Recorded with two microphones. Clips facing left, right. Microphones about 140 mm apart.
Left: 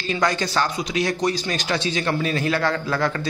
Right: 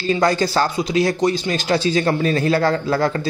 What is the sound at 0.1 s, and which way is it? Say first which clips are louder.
Speech: right 5 dB; 35° right (ahead or behind).